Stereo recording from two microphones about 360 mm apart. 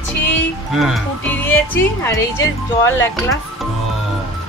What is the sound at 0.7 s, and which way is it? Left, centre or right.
Speech, centre.